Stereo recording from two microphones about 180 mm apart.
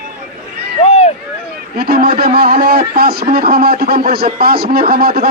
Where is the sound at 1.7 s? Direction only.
60° right (ahead or behind).